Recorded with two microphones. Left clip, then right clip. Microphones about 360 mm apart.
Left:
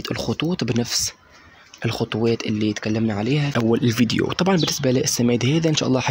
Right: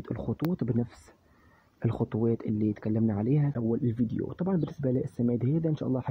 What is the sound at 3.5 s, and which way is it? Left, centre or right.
Speech, right.